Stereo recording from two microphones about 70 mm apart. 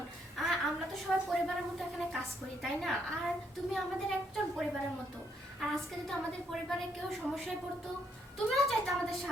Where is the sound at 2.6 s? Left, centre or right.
Centre.